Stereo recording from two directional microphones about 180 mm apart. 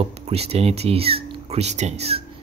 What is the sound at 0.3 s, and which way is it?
Speech, 35° right (ahead or behind).